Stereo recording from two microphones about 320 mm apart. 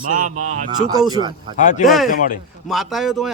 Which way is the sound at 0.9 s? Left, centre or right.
Centre.